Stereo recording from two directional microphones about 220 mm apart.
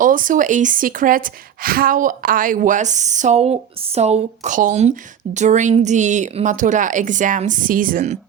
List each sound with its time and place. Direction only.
0.0 s a woman's voice: 40° right (ahead or behind)